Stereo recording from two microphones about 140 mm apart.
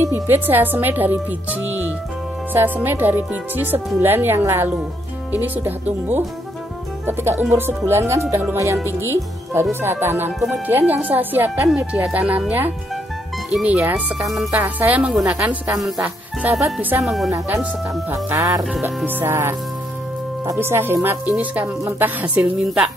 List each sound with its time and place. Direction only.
0.0 s speech: 15° right (ahead or behind)
17.0 s speech: centre (ahead or behind)
18.1 s music: 25° right (ahead or behind)
19.0 s speech: 15° right (ahead or behind)